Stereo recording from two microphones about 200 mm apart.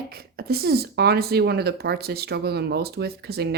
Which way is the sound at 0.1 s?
50° right (ahead or behind).